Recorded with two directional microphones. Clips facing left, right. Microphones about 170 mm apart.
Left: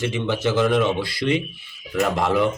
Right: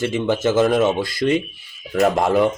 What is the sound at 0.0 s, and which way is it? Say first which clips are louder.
A man's voice: right 4 dB; 45° right (ahead or behind).